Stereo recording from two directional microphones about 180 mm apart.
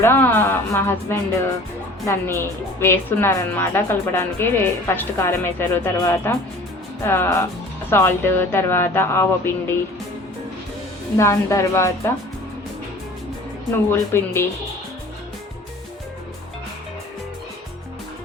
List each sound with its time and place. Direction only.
0.0 s a woman's voice: 10° left (ahead or behind)
11.2 s a woman's voice: 15° left (ahead or behind)
13.9 s a woman's voice: 15° left (ahead or behind)